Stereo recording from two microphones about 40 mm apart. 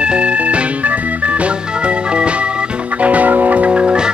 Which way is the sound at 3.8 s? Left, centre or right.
Right.